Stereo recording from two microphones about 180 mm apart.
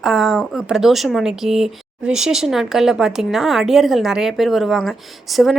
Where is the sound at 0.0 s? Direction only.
Centre (ahead or behind).